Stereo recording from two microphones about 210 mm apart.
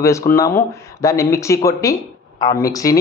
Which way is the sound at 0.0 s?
15° left (ahead or behind).